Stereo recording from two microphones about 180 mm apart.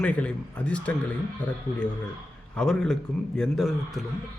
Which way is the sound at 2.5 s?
5° left (ahead or behind).